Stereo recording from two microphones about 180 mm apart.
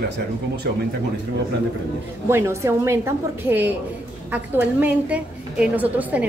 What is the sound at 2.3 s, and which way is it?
A woman's voice, 15° right (ahead or behind).